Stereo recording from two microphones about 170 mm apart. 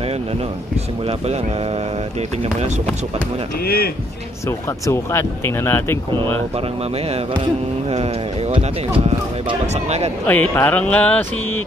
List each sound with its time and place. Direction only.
1.0 s mantra: 40° right (ahead or behind)
3.6 s speech: 65° left (ahead or behind)
4.5 s speech: 15° left (ahead or behind)
7.9 s mantra: 35° right (ahead or behind)
10.2 s speech: 10° left (ahead or behind)